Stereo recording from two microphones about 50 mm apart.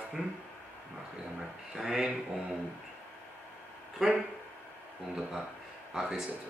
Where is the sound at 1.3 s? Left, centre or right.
Centre.